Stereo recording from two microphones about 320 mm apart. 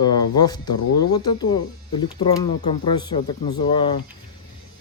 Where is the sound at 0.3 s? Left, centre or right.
Centre.